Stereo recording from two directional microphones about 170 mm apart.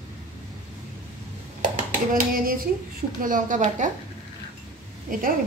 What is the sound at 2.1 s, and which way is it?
A woman's voice, 55° right (ahead or behind).